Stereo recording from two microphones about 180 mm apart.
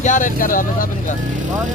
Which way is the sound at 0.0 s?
45° left (ahead or behind).